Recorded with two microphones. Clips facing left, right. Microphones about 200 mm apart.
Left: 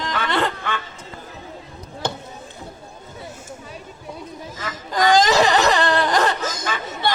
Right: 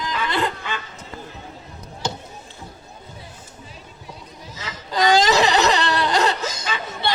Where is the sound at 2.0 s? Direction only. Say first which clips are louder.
Left 1 dB; 55° left (ahead or behind).